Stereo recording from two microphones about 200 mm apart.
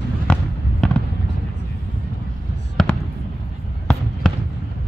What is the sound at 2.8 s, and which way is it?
Fireworks, 5° left (ahead or behind).